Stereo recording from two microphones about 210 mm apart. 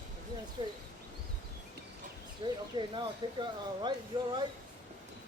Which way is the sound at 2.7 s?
20° right (ahead or behind).